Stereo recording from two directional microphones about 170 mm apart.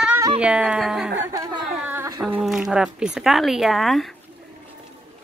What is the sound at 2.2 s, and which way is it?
Speech, centre (ahead or behind).